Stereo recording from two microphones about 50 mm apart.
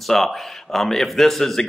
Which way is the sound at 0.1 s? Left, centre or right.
Centre.